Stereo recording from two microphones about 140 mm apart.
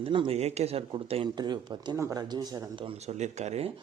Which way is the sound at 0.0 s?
40° right (ahead or behind).